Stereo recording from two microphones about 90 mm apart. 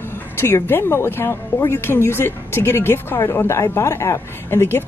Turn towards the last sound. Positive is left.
turn(degrees=25)  # may be behind; listen again after turning